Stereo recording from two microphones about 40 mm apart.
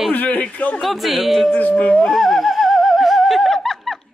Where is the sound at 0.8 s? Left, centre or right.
Centre.